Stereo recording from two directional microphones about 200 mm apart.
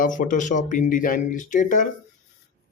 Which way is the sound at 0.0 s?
40° left (ahead or behind).